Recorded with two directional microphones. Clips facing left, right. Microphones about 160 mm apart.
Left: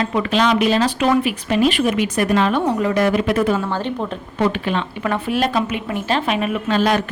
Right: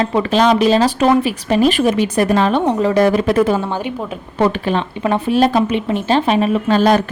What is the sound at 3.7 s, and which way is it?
Speech, 10° right (ahead or behind).